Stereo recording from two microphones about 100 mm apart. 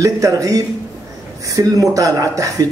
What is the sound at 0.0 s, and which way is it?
Speech, 35° right (ahead or behind).